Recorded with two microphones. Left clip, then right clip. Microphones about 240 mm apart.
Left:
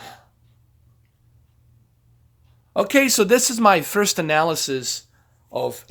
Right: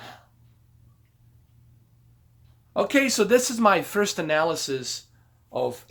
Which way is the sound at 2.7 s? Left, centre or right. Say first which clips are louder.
Left 4 dB; left.